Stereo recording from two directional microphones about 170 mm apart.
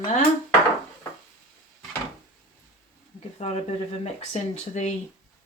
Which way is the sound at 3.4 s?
35° left (ahead or behind).